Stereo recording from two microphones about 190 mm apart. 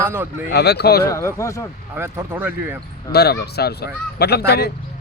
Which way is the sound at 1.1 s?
15° left (ahead or behind).